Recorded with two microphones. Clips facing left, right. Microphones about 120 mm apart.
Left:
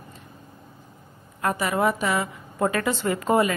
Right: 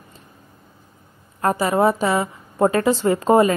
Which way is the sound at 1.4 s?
35° right (ahead or behind).